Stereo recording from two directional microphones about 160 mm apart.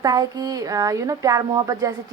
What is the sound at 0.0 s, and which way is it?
Speech, 25° right (ahead or behind).